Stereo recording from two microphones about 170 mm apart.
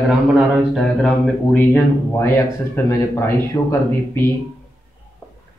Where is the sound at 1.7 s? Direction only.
15° left (ahead or behind).